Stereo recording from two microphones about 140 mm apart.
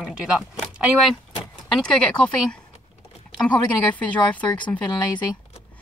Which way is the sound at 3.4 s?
10° left (ahead or behind).